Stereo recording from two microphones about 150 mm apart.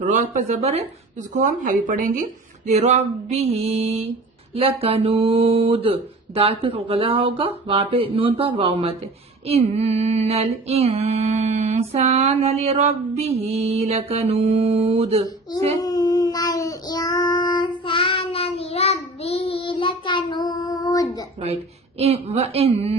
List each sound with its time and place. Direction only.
0.1 s female singing: 55° right (ahead or behind)
1.3 s speech: 60° right (ahead or behind)
2.6 s female singing: 45° right (ahead or behind)
4.5 s speech: 40° right (ahead or behind)
9.5 s female singing: 45° right (ahead or behind)
15.8 s child singing: 25° left (ahead or behind)
21.4 s female singing: 45° right (ahead or behind)